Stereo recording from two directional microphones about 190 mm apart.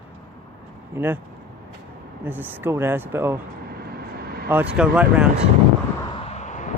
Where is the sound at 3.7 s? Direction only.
55° right (ahead or behind).